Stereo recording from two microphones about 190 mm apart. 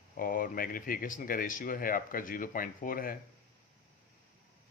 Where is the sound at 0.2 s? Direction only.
45° left (ahead or behind).